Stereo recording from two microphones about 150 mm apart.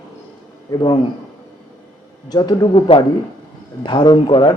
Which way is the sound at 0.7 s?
25° left (ahead or behind).